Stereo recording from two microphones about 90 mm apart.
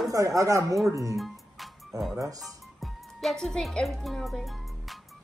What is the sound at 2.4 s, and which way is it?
Music, centre (ahead or behind).